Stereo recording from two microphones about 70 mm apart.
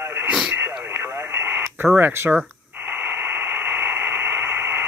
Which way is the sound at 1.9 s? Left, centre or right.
Right.